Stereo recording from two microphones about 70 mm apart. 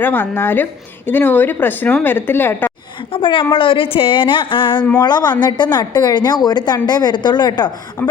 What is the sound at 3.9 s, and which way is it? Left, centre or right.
Speech, left.